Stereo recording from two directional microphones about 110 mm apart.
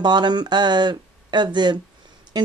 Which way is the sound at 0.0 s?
40° right (ahead or behind).